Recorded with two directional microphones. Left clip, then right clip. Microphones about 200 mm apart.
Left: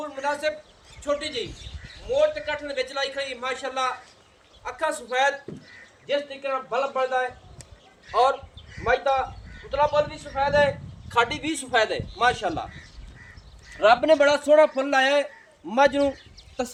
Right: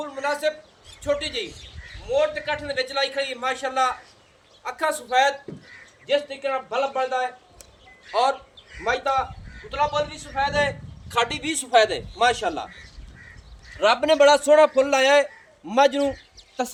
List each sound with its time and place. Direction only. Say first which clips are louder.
0.0 s a man's voice: right 2 dB; 30° right (ahead or behind); by 12.6 s 65° right (ahead or behind)
13.7 s a man's voice: even; 60° right (ahead or behind); by 16.7 s 45° right (ahead or behind)